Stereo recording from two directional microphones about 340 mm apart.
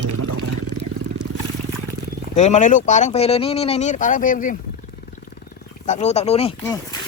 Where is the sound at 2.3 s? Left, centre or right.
Left.